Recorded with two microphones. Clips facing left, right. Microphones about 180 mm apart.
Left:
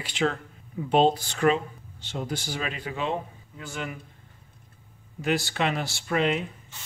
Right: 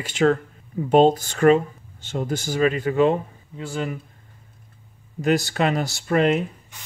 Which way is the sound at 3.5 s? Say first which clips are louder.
Right 7 dB; 30° right (ahead or behind).